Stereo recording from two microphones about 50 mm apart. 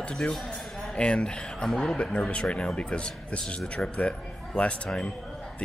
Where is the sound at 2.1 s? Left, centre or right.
Left.